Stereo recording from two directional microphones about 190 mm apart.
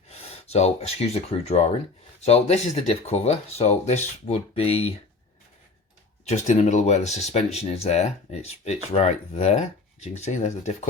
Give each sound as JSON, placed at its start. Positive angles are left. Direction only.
{"t": 0.1, "sound": "speech", "side_deg": 35}
{"t": 6.2, "sound": "speech", "side_deg": 35}